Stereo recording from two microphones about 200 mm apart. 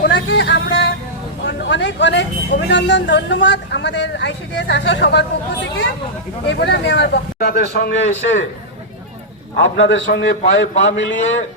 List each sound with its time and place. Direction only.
0.0 s a sound: 55° left (ahead or behind)
1.5 s speech: 60° left (ahead or behind)
6.5 s speech: 60° left (ahead or behind)
9.6 s a man's voice: 70° left (ahead or behind)